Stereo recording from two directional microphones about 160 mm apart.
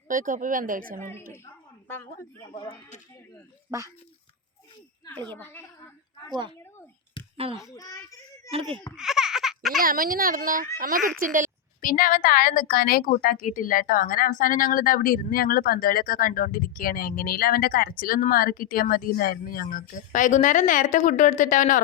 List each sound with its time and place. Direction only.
0.1 s speech: 55° right (ahead or behind)
3.7 s speech: 20° right (ahead or behind)
5.4 s a woman's voice: 15° left (ahead or behind)
7.5 s a child's voice: 20° left (ahead or behind)
8.4 s speech: 35° right (ahead or behind)
9.0 s baby laughter: 5° right (ahead or behind)
9.8 s a woman's voice: 60° right (ahead or behind)
11.8 s a woman's voice: 60° left (ahead or behind)